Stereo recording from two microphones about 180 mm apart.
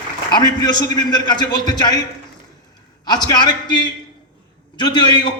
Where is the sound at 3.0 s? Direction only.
20° left (ahead or behind).